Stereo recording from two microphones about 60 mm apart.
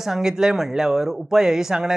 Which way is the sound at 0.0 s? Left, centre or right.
Centre.